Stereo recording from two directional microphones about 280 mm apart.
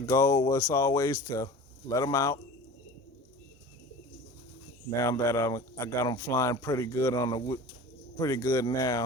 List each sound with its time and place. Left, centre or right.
0.0 s a man's voice: centre
4.9 s a man's voice: centre